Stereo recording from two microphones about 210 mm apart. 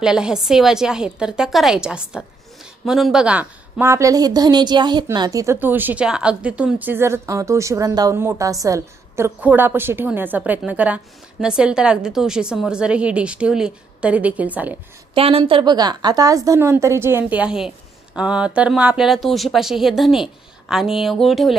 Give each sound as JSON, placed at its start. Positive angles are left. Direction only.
{"t": 0.0, "sound": "a woman's voice", "side_deg": -5}
{"t": 15.1, "sound": "a woman's voice", "side_deg": -25}